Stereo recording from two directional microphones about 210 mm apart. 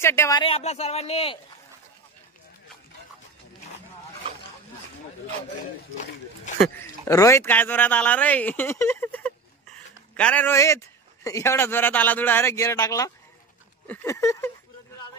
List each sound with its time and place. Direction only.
0.0 s speech: 15° left (ahead or behind)
7.1 s a man's voice: 15° left (ahead or behind)